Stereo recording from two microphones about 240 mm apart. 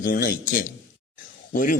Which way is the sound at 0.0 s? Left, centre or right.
Left.